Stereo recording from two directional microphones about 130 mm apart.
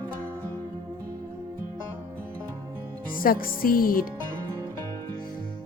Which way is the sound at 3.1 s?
90° left.